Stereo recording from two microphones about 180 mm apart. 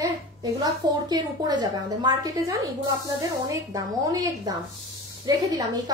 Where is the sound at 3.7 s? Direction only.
20° right (ahead or behind).